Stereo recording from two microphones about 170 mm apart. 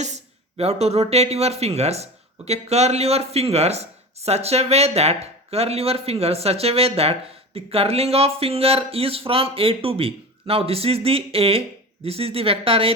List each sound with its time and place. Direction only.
0.0 s speech: 40° right (ahead or behind)